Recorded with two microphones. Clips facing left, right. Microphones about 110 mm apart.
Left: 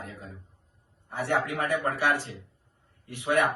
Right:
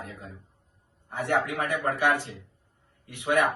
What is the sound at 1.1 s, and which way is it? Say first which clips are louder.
Speech: right 1 dB; 20° right (ahead or behind).